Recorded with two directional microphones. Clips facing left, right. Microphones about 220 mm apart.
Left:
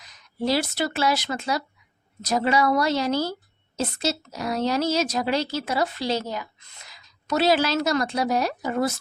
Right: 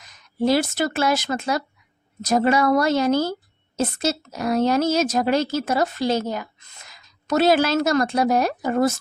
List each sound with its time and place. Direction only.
0.0 s a woman's voice: 50° right (ahead or behind)